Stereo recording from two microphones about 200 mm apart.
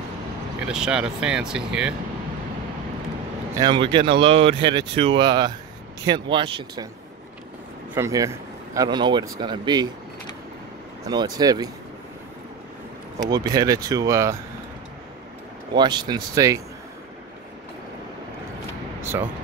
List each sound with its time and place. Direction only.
0.7 s speech: 5° right (ahead or behind)
3.5 s speech: 20° right (ahead or behind)
7.9 s speech: 15° right (ahead or behind)
11.1 s speech: 20° right (ahead or behind)
13.3 s speech: 20° right (ahead or behind)
15.7 s speech: 20° right (ahead or behind)